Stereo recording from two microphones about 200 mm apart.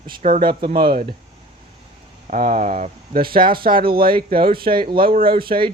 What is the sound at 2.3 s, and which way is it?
A man's voice, 40° right (ahead or behind).